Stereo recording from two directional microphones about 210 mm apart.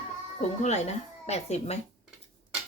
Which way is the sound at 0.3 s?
35° left (ahead or behind).